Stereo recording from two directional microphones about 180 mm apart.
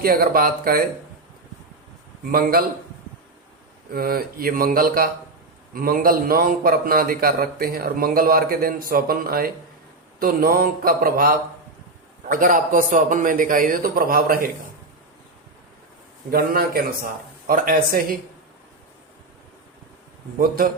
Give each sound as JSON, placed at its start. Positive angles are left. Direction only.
{"t": 0.0, "sound": "a man's voice", "side_deg": -55}
{"t": 2.3, "sound": "a man's voice", "side_deg": -55}
{"t": 3.9, "sound": "a man's voice", "side_deg": -55}
{"t": 16.3, "sound": "a man's voice", "side_deg": -55}